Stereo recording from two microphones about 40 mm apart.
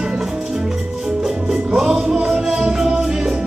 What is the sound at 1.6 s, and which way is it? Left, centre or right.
Music, centre.